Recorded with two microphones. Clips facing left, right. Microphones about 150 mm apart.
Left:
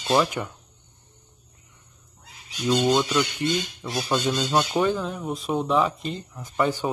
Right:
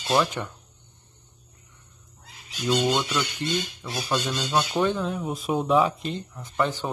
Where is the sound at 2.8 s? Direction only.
15° left (ahead or behind).